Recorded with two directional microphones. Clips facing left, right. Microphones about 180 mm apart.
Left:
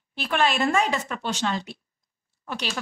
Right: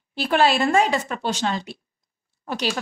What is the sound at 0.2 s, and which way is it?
A woman's voice, 35° right (ahead or behind).